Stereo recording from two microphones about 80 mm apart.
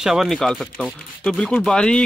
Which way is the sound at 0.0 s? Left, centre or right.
Centre.